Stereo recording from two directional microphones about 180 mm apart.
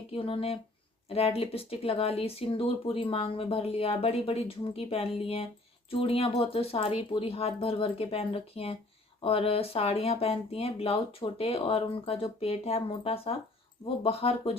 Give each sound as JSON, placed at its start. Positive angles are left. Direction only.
{"t": 0.1, "sound": "speech", "side_deg": 30}